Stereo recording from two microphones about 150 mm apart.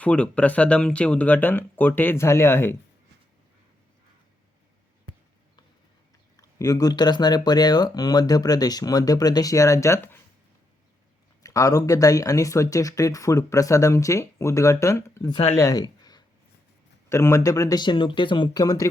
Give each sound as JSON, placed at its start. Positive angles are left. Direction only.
{"t": 0.0, "sound": "speech", "side_deg": 10}
{"t": 6.3, "sound": "speech", "side_deg": 25}
{"t": 11.4, "sound": "speech", "side_deg": 20}
{"t": 15.5, "sound": "a sound", "side_deg": 25}
{"t": 17.1, "sound": "speech", "side_deg": 20}